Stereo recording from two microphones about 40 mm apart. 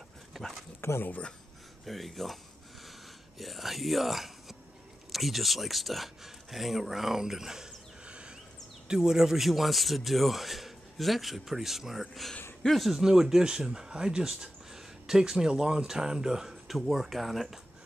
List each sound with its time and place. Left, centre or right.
0.3 s dog: centre
0.8 s speech: left
1.9 s speech: centre
3.3 s speech: centre
8.8 s speech: centre
9.5 s speech: centre
16.6 s speech: centre